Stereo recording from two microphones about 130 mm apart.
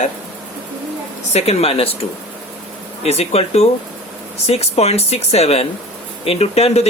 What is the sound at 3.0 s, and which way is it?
Speech, 55° left (ahead or behind).